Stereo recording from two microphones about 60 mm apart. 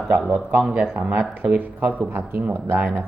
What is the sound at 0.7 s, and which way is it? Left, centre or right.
Speech, right.